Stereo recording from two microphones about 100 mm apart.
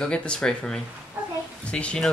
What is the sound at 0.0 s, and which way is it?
Speech, 10° left (ahead or behind).